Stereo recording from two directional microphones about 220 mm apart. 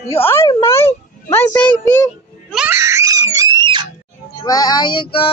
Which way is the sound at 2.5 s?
10° right (ahead or behind).